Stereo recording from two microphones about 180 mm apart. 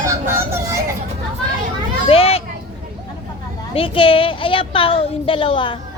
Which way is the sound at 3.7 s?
30° left (ahead or behind).